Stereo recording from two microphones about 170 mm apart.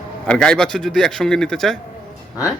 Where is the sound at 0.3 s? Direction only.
5° left (ahead or behind).